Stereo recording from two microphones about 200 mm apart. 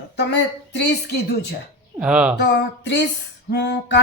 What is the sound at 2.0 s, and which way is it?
Speech, 5° right (ahead or behind).